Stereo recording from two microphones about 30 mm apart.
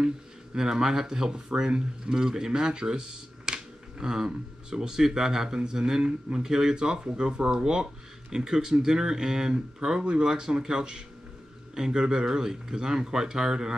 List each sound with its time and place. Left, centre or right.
0.6 s speech: centre
6.7 s speech: right